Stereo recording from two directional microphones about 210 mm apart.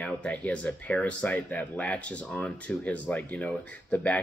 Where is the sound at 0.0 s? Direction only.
5° left (ahead or behind).